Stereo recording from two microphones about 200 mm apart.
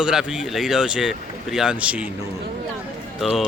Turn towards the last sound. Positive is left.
turn(degrees=0)  # may be behind; listen again after turning